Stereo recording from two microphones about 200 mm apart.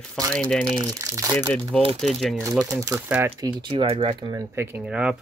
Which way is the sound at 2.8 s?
10° right (ahead or behind).